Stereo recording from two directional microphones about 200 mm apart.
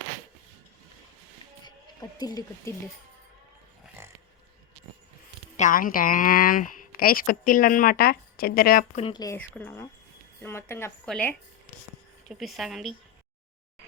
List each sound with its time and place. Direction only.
1.6 s speech: 20° left (ahead or behind)
5.5 s a woman's voice: 40° left (ahead or behind)
9.0 s a woman's voice: 25° left (ahead or behind); by 12.9 s centre (ahead or behind)